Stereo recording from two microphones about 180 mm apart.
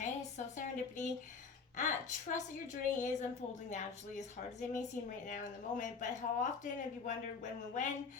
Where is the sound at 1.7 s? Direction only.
45° left (ahead or behind).